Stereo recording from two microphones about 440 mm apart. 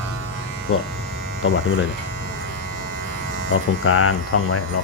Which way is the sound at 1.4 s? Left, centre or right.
Left.